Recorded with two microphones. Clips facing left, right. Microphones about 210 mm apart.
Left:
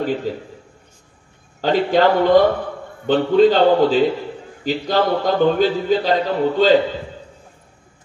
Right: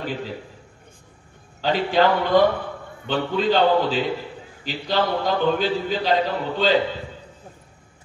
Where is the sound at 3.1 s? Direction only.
45° left (ahead or behind).